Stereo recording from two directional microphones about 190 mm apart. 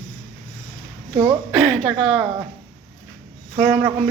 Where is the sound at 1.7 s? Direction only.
Centre (ahead or behind).